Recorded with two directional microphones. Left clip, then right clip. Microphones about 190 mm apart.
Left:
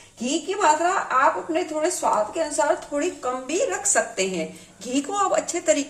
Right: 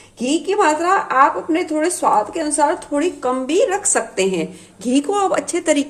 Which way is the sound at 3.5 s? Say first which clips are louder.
Right 6 dB; 45° right (ahead or behind).